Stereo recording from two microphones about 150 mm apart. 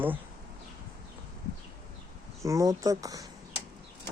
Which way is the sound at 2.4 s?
20° right (ahead or behind).